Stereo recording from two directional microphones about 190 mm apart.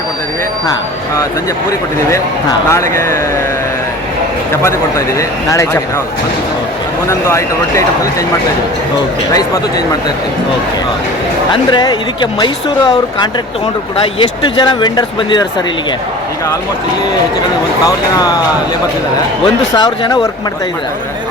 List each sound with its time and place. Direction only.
2.0 s speech: 15° left (ahead or behind)
4.6 s speech: 15° left (ahead or behind)
7.1 s speech: 15° left (ahead or behind)
9.3 s speech: 20° left (ahead or behind)
11.5 s speech: 25° left (ahead or behind)
17.8 s speech: 20° left (ahead or behind)
19.7 s speech: 20° left (ahead or behind)